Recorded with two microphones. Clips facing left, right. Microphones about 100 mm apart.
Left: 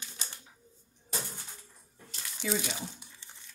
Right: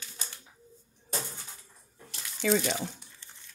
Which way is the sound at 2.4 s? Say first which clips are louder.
Right 7 dB; 75° right (ahead or behind).